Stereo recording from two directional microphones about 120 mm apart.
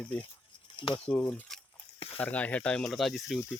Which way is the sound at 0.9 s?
10° left (ahead or behind).